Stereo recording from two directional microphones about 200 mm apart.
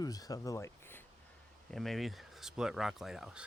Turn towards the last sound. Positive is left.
turn(degrees=0)  # may be behind; listen again after turning